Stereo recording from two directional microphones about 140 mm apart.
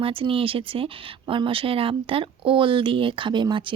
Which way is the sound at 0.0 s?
40° right (ahead or behind).